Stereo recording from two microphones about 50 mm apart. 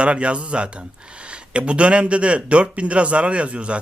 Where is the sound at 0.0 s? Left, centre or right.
Right.